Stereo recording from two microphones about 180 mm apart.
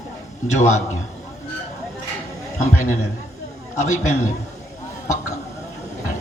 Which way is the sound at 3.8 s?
40° left (ahead or behind).